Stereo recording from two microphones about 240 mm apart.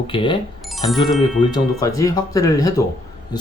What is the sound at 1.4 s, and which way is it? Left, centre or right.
Speech, centre.